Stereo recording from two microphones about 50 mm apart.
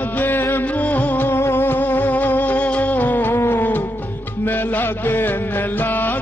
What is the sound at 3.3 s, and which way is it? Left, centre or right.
Music, left.